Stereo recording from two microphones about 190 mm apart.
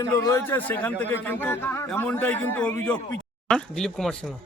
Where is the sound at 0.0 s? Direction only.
20° left (ahead or behind).